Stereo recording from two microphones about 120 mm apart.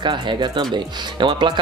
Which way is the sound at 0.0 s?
40° right (ahead or behind).